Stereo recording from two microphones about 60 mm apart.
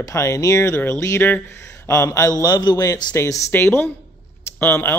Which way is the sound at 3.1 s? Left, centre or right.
Left.